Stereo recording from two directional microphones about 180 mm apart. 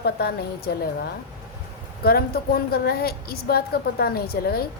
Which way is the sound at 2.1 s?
60° left (ahead or behind).